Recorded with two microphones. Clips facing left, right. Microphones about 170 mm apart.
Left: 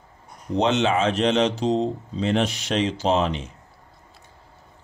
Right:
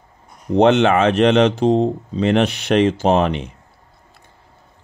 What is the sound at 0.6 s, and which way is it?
Speech, 60° right (ahead or behind).